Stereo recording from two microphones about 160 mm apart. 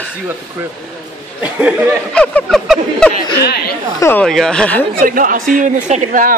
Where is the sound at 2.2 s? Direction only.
5° left (ahead or behind).